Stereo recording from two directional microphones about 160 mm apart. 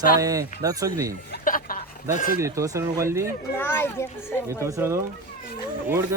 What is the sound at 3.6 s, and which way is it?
A child's voice, 15° left (ahead or behind).